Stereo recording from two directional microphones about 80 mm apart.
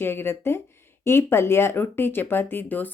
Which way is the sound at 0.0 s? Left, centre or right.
Left.